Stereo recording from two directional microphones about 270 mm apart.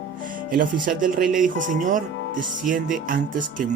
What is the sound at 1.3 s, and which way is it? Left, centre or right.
Speech, right.